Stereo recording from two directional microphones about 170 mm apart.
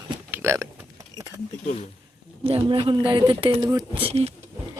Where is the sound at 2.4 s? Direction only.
30° right (ahead or behind).